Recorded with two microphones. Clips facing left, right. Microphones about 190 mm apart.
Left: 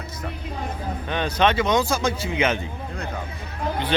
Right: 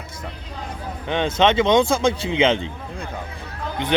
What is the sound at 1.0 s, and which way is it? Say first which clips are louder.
Speech: right 3 dB; 20° right (ahead or behind).